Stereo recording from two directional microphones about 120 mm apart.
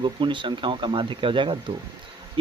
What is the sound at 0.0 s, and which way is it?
Speech, 40° right (ahead or behind).